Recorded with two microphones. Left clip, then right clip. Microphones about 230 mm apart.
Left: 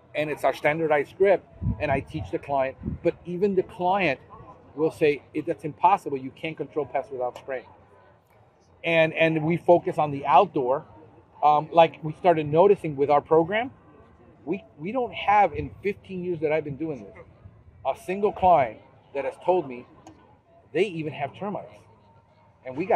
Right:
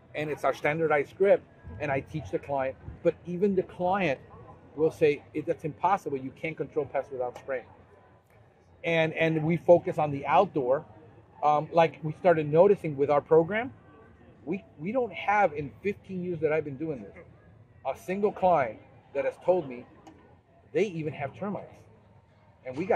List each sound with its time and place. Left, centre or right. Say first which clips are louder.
0.1 s speech: left 4 dB; left
8.8 s speech: left 5 dB; left